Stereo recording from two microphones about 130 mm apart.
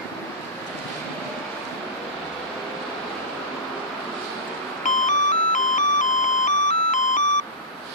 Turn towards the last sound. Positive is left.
turn(degrees=70)  # may be behind; listen again after turning